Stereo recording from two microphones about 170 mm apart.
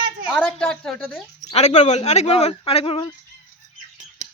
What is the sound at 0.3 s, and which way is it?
Speech, 5° left (ahead or behind).